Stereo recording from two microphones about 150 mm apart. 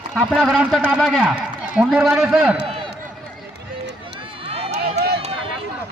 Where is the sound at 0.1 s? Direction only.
Centre (ahead or behind).